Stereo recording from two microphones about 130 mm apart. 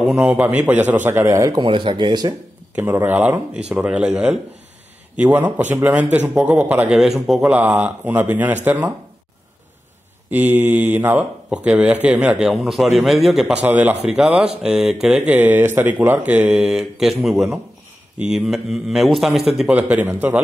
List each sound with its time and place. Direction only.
0.1 s speech: 10° right (ahead or behind); by 2.3 s 35° right (ahead or behind)
2.7 s speech: 15° right (ahead or behind)
7.0 s speech: centre (ahead or behind)
10.3 s speech: 15° right (ahead or behind)